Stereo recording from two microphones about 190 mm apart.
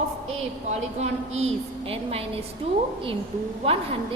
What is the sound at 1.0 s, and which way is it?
A woman's voice, 35° right (ahead or behind).